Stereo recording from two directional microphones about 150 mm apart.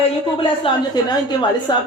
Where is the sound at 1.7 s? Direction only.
30° left (ahead or behind).